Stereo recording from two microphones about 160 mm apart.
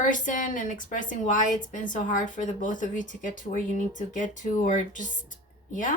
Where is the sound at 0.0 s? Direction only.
55° left (ahead or behind).